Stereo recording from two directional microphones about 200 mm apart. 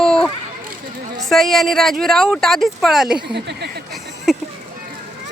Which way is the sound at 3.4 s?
55° right (ahead or behind).